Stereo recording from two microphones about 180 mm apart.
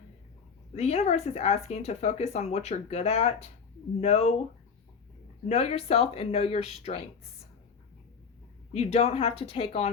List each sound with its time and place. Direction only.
0.7 s speech: 35° left (ahead or behind)
5.5 s speech: 35° left (ahead or behind)
8.7 s speech: 35° left (ahead or behind)